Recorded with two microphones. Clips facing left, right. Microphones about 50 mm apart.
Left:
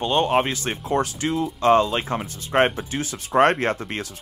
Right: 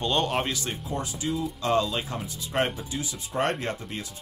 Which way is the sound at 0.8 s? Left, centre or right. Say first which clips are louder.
Left 10 dB; left.